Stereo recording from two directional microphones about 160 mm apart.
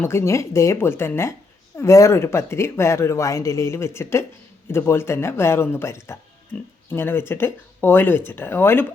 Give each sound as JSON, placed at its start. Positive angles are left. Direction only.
{"t": 0.0, "sound": "speech", "side_deg": 15}